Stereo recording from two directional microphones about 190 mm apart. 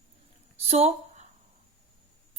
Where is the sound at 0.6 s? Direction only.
30° right (ahead or behind).